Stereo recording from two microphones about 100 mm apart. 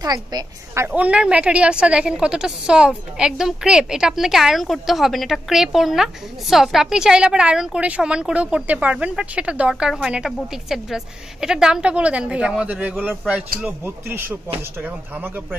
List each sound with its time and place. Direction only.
0.0 s a woman's voice: 40° right (ahead or behind)
0.7 s a woman's voice: 15° right (ahead or behind)